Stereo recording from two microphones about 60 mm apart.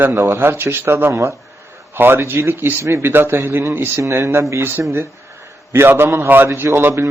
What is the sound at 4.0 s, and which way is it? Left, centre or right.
Speech, right.